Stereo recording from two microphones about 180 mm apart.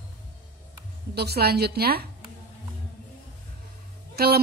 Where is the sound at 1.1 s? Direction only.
65° right (ahead or behind).